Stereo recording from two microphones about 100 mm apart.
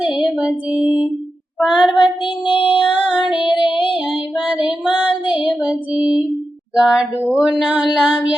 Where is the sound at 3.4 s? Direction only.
60° left (ahead or behind).